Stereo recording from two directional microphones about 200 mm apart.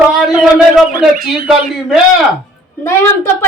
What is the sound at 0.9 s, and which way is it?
Speech, 45° right (ahead or behind).